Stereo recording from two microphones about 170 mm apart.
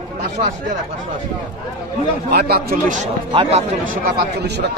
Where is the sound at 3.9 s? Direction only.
60° right (ahead or behind).